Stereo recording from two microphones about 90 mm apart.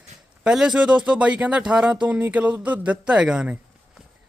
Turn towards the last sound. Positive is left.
turn(degrees=-10)  # may be behind; listen again after turning